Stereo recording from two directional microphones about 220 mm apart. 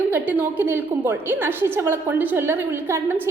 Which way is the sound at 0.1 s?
10° right (ahead or behind).